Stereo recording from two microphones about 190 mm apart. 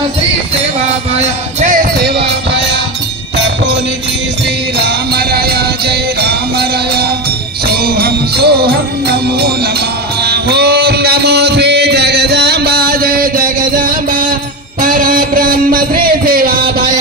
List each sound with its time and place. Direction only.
1.6 s music: 45° right (ahead or behind)
4.8 s music: 55° right (ahead or behind)
7.7 s jingle bell: 55° right (ahead or behind)
10.2 s music: 60° right (ahead or behind)